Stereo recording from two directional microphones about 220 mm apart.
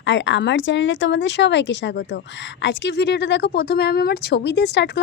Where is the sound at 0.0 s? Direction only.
55° left (ahead or behind).